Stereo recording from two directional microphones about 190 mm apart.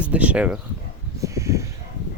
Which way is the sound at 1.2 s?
15° right (ahead or behind).